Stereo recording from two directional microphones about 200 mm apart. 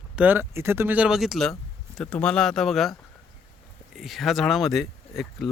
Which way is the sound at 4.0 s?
Centre (ahead or behind).